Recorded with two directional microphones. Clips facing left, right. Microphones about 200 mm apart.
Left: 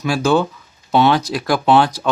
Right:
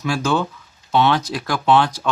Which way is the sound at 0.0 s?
15° left (ahead or behind).